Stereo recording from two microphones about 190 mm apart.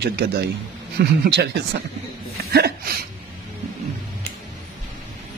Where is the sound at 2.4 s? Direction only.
55° right (ahead or behind).